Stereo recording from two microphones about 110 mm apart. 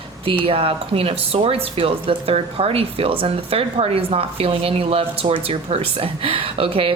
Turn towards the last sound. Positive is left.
turn(degrees=-55)  # may be behind; listen again after turning